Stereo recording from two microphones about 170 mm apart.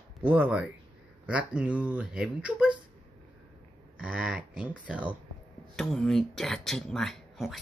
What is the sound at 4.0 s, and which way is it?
Speech, 5° right (ahead or behind).